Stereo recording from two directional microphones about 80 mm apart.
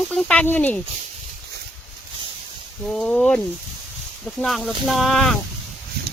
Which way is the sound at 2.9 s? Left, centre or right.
Centre.